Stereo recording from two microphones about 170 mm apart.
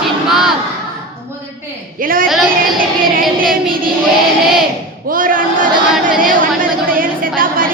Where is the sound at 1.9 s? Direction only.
55° right (ahead or behind).